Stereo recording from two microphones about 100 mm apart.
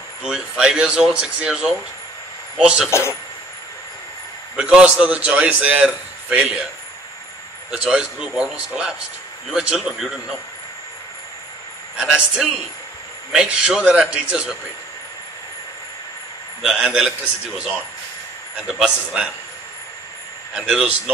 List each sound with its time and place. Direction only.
0.2 s a man's voice: 5° right (ahead or behind)
2.9 s speech: 25° left (ahead or behind)
4.6 s a man's voice: 10° right (ahead or behind)
7.7 s a man's voice: 5° right (ahead or behind)
12.0 s a man's voice: 5° right (ahead or behind)
16.6 s a man's voice: 5° right (ahead or behind)
20.5 s a man's voice: 10° right (ahead or behind)